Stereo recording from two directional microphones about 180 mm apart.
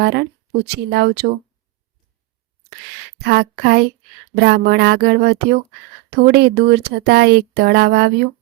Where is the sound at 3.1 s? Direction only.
65° right (ahead or behind).